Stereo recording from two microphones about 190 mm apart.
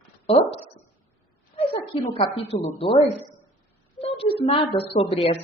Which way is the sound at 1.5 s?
30° left (ahead or behind).